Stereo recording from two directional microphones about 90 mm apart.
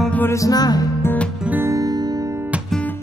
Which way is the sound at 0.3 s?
40° left (ahead or behind).